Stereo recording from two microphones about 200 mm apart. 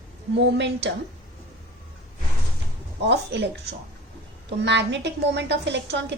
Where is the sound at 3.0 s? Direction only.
60° right (ahead or behind).